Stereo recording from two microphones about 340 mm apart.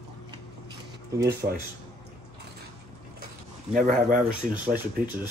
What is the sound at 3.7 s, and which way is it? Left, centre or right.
Speech, right.